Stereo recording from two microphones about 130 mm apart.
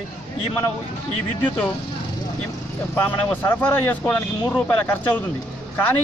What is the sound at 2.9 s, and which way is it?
Speech, 15° left (ahead or behind).